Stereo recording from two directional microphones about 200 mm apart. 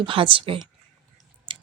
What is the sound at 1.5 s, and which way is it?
Drip, 25° right (ahead or behind).